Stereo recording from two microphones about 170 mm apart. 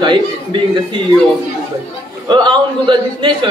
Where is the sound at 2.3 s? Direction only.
25° right (ahead or behind).